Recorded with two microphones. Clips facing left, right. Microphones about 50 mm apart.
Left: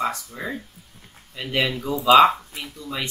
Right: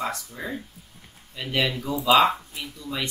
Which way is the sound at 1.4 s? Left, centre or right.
Centre.